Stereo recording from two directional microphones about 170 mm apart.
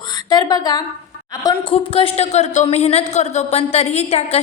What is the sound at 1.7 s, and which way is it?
A woman's voice, 35° left (ahead or behind).